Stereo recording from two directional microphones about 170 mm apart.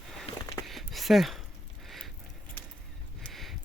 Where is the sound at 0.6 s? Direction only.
Centre (ahead or behind).